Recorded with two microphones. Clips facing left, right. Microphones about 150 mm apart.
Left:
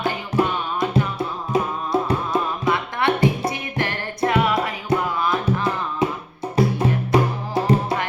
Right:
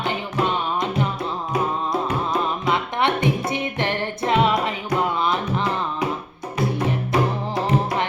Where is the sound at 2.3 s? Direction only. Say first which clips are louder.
Even; 20° right (ahead or behind).